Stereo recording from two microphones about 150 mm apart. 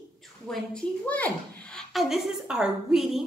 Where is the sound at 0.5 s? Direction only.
5° left (ahead or behind).